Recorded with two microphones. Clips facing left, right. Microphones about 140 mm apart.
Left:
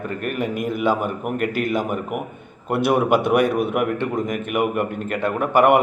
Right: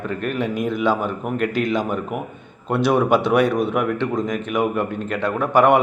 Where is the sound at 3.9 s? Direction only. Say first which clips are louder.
Right 1 dB; 55° left (ahead or behind).